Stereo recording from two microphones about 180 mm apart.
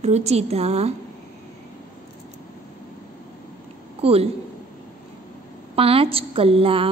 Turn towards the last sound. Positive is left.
turn(degrees=-30)  # may be behind; listen again after turning